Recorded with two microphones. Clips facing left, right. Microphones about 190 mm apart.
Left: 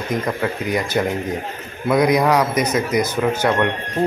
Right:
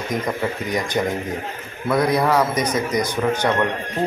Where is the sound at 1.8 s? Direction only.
15° left (ahead or behind).